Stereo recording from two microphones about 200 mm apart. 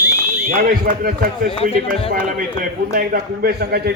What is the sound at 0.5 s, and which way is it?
A man's voice, 45° right (ahead or behind).